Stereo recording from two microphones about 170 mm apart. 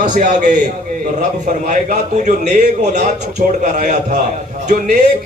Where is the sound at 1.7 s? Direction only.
45° right (ahead or behind).